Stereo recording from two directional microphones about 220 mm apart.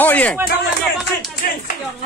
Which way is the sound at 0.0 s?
5° left (ahead or behind).